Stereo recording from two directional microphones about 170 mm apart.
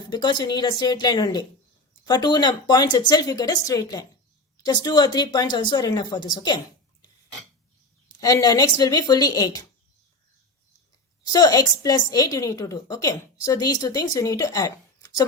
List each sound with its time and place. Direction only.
0.1 s a woman's voice: 25° left (ahead or behind)
8.2 s a woman's voice: 20° left (ahead or behind)
11.2 s a woman's voice: 20° left (ahead or behind)